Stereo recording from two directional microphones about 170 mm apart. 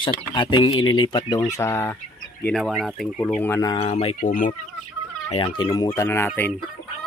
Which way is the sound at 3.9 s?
45° left (ahead or behind).